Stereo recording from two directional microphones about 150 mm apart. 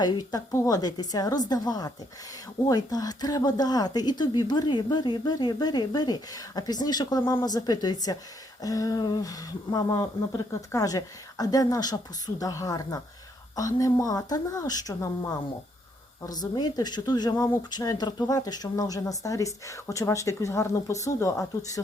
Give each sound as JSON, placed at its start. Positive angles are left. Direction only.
{"t": 0.0, "sound": "speech", "side_deg": 25}